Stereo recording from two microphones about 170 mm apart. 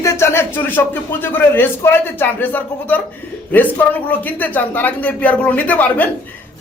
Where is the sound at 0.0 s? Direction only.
15° left (ahead or behind).